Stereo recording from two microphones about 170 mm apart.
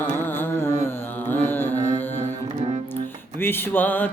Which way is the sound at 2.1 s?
35° right (ahead or behind).